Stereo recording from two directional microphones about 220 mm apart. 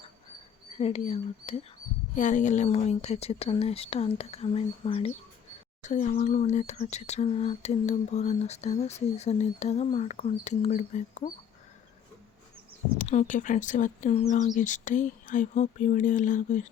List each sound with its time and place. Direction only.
0.8 s speech: 30° left (ahead or behind)
13.0 s speech: 35° left (ahead or behind)